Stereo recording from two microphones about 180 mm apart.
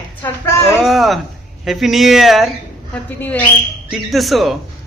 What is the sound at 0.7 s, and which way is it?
A woman's voice, centre (ahead or behind).